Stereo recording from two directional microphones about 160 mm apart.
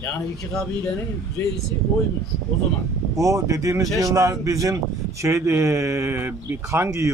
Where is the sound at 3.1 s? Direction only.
20° right (ahead or behind).